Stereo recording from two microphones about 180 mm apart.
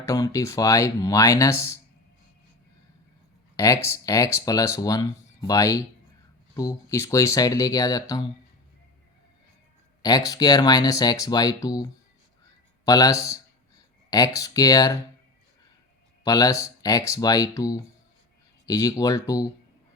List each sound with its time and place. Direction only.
0.0 s speech: 20° left (ahead or behind)
3.8 s speech: 20° left (ahead or behind)
10.0 s speech: 20° left (ahead or behind)
16.2 s speech: 20° left (ahead or behind)